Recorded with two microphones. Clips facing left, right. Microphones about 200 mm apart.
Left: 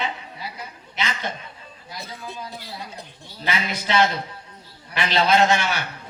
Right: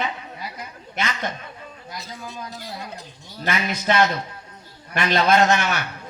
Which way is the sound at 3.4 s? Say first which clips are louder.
Right 3 dB; 50° right (ahead or behind).